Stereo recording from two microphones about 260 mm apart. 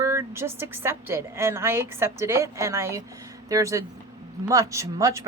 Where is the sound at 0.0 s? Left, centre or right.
Centre.